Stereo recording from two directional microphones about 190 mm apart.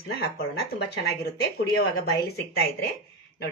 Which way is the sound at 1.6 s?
55° left (ahead or behind).